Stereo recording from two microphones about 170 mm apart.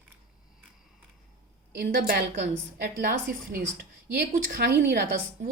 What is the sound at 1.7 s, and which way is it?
Speech, 55° right (ahead or behind).